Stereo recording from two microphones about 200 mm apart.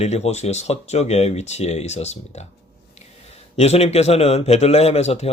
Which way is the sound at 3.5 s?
30° left (ahead or behind).